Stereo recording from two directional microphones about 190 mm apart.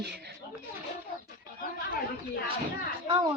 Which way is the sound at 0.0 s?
60° right (ahead or behind).